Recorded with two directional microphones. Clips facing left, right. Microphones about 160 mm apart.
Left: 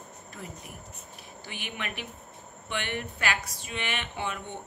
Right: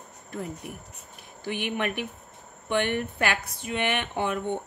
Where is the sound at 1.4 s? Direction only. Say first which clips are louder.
Right 10 dB; 50° right (ahead or behind).